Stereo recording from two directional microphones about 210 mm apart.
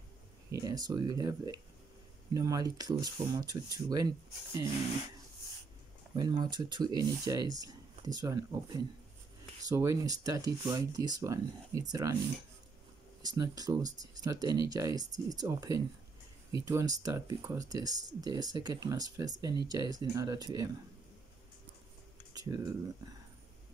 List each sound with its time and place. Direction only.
0.5 s speech: 15° right (ahead or behind)
6.1 s speech: 20° right (ahead or behind)
13.2 s speech: 20° right (ahead or behind)
22.3 s speech: 20° right (ahead or behind)